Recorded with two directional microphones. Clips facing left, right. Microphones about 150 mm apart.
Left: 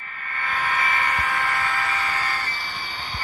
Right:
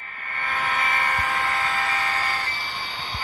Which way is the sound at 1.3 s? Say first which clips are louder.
Even; 20° right (ahead or behind).